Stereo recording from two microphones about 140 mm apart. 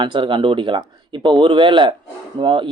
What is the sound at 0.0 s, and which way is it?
Speech, 35° right (ahead or behind).